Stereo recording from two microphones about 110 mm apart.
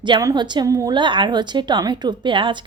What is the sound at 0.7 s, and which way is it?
Speech, 30° right (ahead or behind).